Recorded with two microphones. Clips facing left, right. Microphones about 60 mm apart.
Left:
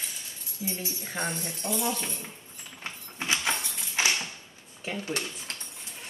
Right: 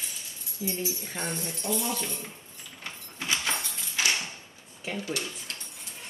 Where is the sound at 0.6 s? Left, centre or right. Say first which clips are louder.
Right 3 dB; left.